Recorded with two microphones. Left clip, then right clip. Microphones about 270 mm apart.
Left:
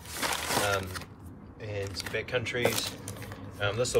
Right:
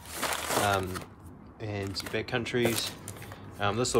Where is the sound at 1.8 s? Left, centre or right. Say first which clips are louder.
Right 2 dB; centre.